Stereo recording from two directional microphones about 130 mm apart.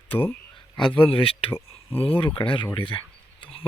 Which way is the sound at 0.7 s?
40° left (ahead or behind).